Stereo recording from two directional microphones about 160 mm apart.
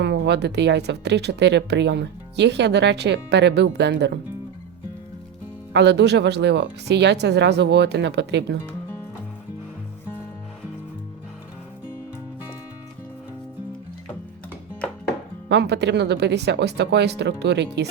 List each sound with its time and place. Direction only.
0.0 s speech: 90° right
5.7 s speech: 90° right
8.6 s music: 15° left (ahead or behind)
15.4 s speech: 90° right